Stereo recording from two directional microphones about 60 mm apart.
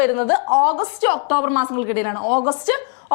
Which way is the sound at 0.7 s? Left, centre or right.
Left.